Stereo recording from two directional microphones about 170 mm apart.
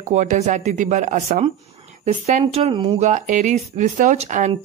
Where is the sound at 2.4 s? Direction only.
35° right (ahead or behind).